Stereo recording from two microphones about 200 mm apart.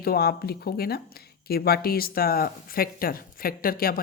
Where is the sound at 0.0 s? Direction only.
50° left (ahead or behind).